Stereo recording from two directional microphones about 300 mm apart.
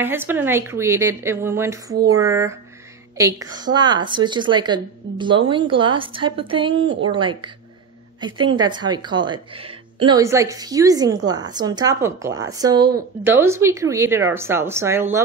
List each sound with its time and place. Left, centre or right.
0.0 s a woman's voice: centre